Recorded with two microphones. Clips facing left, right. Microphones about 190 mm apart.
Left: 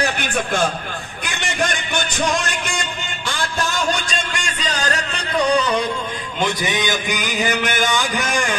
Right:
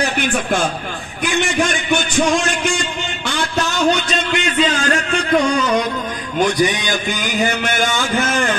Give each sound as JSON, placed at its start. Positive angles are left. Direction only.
{"t": 0.2, "sound": "a man's voice", "side_deg": -60}
{"t": 2.1, "sound": "music", "side_deg": -55}
{"t": 3.9, "sound": "music", "side_deg": 45}
{"t": 6.4, "sound": "music", "side_deg": 20}
{"t": 7.8, "sound": "a sound", "side_deg": 15}